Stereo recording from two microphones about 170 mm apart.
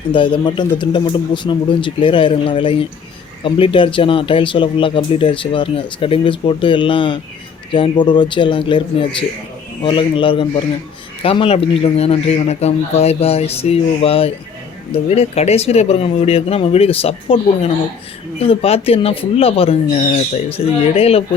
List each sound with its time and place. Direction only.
0.1 s a man's voice: 30° left (ahead or behind)